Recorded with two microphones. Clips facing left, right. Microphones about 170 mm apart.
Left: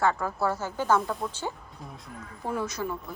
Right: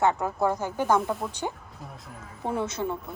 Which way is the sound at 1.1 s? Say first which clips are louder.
Right 2 dB; 5° right (ahead or behind).